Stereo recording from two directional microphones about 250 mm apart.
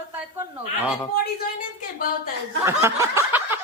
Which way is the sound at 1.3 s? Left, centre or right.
Left.